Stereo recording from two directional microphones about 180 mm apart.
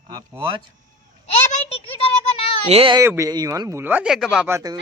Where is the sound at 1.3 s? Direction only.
35° left (ahead or behind).